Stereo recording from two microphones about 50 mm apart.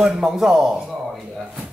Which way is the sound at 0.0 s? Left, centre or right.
Centre.